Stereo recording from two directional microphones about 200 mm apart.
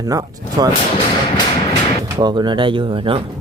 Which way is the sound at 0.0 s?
15° right (ahead or behind).